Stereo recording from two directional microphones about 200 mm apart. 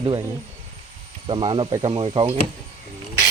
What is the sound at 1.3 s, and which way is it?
Speech, 25° right (ahead or behind).